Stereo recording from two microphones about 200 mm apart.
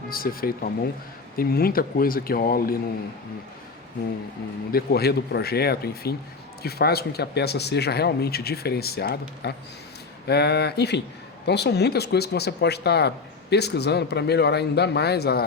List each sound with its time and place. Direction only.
0.1 s speech: 45° left (ahead or behind)
4.7 s speech: 50° left (ahead or behind)